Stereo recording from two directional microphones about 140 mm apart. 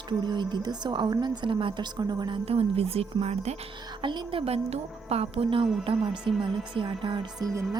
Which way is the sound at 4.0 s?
35° right (ahead or behind).